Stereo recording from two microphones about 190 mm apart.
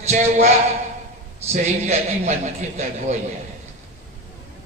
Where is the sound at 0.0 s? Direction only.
35° right (ahead or behind).